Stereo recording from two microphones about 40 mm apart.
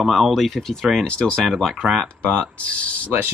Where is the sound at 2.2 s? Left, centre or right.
Left.